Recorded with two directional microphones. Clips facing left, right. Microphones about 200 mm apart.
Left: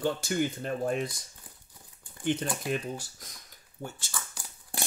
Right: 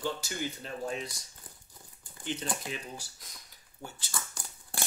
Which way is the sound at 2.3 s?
50° left (ahead or behind).